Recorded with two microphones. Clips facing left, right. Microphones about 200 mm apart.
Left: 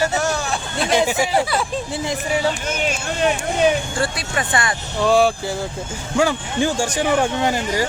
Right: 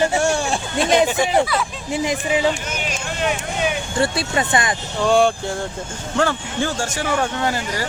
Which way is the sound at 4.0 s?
25° right (ahead or behind).